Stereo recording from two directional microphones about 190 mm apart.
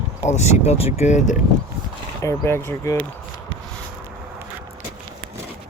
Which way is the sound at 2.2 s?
15° left (ahead or behind).